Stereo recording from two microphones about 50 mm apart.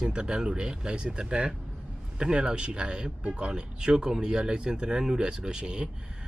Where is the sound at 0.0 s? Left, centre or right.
Centre.